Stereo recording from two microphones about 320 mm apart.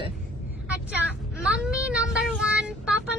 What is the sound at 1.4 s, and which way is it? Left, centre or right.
Child singing, centre.